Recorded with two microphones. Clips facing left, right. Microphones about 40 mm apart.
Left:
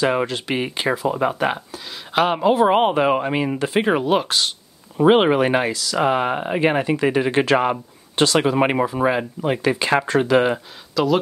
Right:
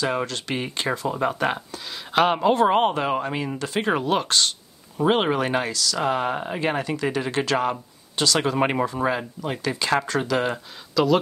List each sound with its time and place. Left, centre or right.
0.0 s speech: centre
2.7 s speech: centre
3.9 s speech: centre
4.9 s speech: left
8.4 s speech: centre
11.0 s speech: centre